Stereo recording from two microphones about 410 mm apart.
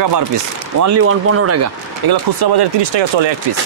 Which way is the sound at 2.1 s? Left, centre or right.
Right.